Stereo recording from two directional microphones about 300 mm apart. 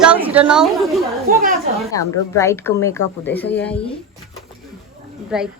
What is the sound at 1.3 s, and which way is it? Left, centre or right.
Speech, right.